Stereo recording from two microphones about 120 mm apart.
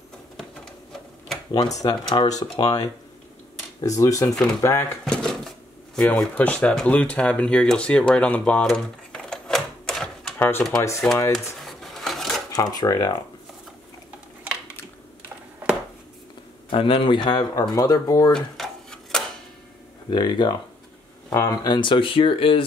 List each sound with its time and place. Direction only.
1.8 s speech: 35° left (ahead or behind)
5.0 s drawer open or close: 5° left (ahead or behind)
5.9 s speech: 10° left (ahead or behind)
8.6 s typewriter: 5° left (ahead or behind)
11.0 s speech: 5° left (ahead or behind)
11.3 s a sound: centre (ahead or behind)
12.5 s speech: 30° left (ahead or behind)
16.7 s speech: 45° left (ahead or behind); by 18.3 s 30° left (ahead or behind)
18.3 s a sound: 5° left (ahead or behind)
20.1 s speech: 40° left (ahead or behind)